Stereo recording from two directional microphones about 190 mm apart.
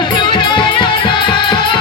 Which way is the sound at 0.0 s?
25° left (ahead or behind).